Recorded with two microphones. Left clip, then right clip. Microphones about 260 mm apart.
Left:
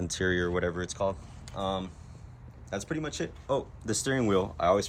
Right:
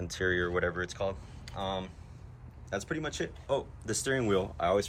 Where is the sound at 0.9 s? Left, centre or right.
Left.